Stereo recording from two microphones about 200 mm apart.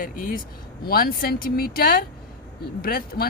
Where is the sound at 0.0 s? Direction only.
45° left (ahead or behind).